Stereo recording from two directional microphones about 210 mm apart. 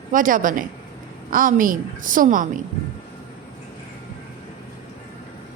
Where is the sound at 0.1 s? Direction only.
40° right (ahead or behind).